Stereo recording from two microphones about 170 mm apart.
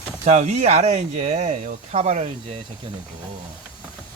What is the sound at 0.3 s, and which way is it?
Speech, 45° right (ahead or behind).